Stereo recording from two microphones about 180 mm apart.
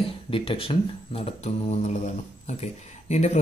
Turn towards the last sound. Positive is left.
turn(degrees=40)  # may be behind; listen again after turning